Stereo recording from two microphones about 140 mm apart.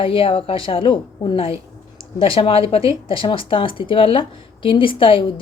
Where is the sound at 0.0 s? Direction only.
40° left (ahead or behind).